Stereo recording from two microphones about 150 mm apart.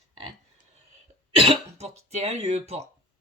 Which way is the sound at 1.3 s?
40° right (ahead or behind).